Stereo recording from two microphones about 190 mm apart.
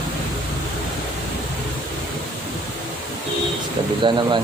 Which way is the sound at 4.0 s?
25° right (ahead or behind).